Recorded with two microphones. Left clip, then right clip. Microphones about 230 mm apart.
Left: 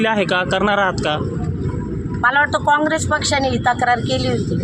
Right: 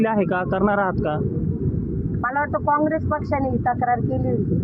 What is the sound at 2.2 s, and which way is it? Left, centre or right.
Speech, left.